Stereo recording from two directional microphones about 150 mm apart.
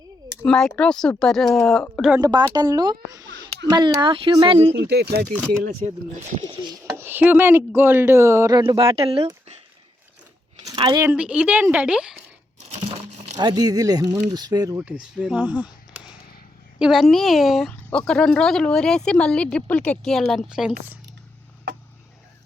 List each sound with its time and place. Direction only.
0.4 s speech: 5° left (ahead or behind)
2.2 s a child's voice: 25° right (ahead or behind)
4.8 s speech: 90° right
5.8 s speech: 45° right (ahead or behind)
6.9 s speech: 15° right (ahead or behind); by 9.2 s 40° right (ahead or behind)
10.6 s a sound: 25° right (ahead or behind)
11.0 s speech: 10° right (ahead or behind)
12.7 s crumpling: 45° right (ahead or behind)
13.4 s a child's voice: 25° right (ahead or behind)
14.8 s speech: 10° right (ahead or behind)
16.7 s speech: 5° right (ahead or behind)